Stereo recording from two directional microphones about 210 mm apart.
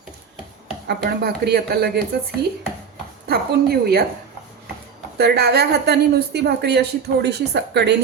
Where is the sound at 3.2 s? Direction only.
50° right (ahead or behind).